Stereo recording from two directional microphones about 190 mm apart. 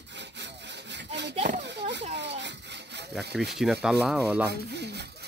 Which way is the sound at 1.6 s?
65° right (ahead or behind).